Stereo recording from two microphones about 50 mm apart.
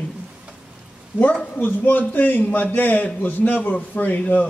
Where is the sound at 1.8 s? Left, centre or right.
Left.